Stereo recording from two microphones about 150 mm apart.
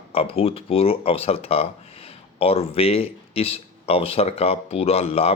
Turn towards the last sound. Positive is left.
turn(degrees=40)  # may be behind; listen again after turning